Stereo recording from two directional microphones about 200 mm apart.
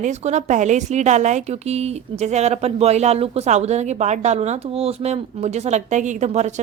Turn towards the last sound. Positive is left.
turn(degrees=-35)  # may be behind; listen again after turning